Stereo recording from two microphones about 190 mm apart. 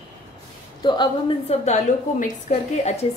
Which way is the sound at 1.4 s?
35° left (ahead or behind).